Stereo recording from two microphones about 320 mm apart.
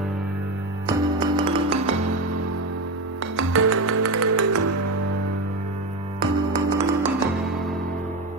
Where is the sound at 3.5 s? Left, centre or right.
Right.